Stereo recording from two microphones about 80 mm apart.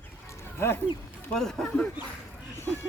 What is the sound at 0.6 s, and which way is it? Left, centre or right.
Speech, left.